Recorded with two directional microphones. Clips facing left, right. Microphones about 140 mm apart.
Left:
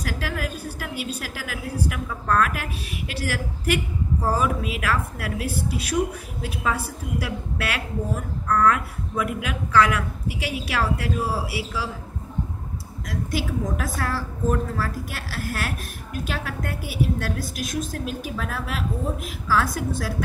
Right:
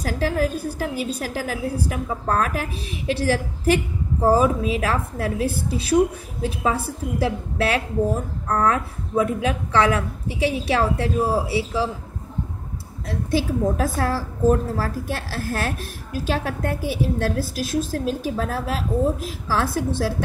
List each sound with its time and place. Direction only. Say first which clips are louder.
0.0 s a woman's voice: right 7 dB; 35° right (ahead or behind)
6.4 s a woman's voice: right 4 dB; 30° right (ahead or behind)
13.0 s a woman's voice: right 5 dB; 30° right (ahead or behind)